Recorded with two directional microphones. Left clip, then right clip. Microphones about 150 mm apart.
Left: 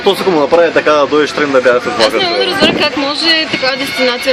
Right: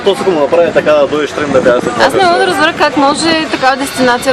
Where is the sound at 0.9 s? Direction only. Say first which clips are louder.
Even; 60° left (ahead or behind).